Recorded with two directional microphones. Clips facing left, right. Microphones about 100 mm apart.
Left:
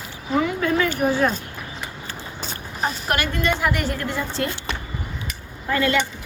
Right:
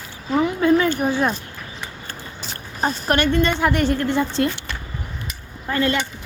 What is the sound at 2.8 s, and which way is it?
A woman's voice, 40° right (ahead or behind).